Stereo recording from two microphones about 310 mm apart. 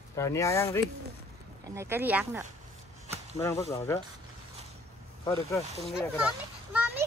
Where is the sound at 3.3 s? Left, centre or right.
Centre.